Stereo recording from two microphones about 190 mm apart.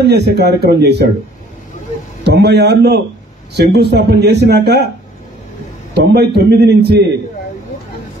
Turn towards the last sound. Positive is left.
turn(degrees=-60)  # may be behind; listen again after turning